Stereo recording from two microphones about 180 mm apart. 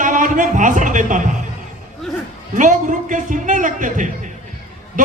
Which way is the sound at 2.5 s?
45° right (ahead or behind).